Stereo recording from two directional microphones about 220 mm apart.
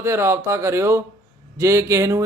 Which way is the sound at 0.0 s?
10° right (ahead or behind).